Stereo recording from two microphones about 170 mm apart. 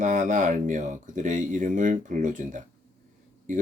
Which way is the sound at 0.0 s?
45° right (ahead or behind).